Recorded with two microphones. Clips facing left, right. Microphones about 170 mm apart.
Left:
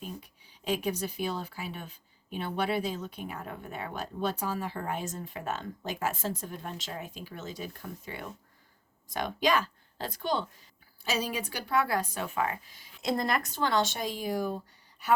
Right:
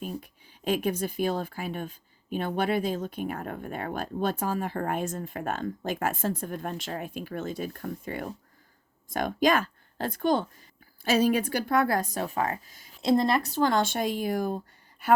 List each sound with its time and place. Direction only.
0.2 s speech: 50° right (ahead or behind)
13.0 s speech: 30° right (ahead or behind); by 14.5 s 55° right (ahead or behind)